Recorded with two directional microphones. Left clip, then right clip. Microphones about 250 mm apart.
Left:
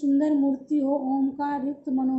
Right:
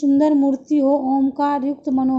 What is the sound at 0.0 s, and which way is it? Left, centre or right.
Speech, right.